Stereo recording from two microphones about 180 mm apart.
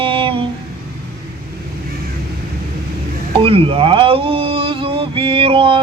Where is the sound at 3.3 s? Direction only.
30° right (ahead or behind).